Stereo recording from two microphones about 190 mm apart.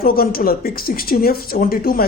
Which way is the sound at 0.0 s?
50° left (ahead or behind).